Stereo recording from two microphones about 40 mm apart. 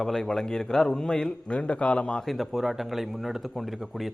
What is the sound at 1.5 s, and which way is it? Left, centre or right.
Speech, left.